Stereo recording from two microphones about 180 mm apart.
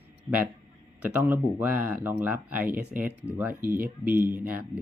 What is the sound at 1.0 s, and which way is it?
Speech, 10° right (ahead or behind).